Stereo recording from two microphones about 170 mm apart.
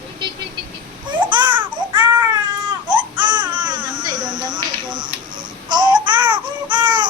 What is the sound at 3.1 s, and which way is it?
Babbling, 25° right (ahead or behind).